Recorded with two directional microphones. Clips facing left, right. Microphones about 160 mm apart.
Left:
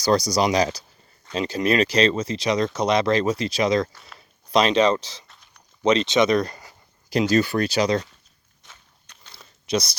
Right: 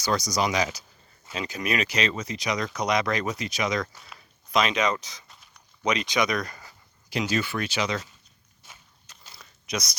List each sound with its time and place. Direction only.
0.0 s speech: 35° left (ahead or behind)
7.1 s speech: 40° left (ahead or behind)
8.6 s walk: 10° right (ahead or behind)
9.3 s a sound: 30° left (ahead or behind)